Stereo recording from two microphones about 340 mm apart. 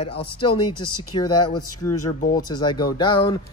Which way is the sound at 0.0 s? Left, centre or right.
Centre.